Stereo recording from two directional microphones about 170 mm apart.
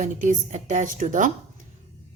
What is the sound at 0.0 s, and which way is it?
A woman's voice, 45° right (ahead or behind).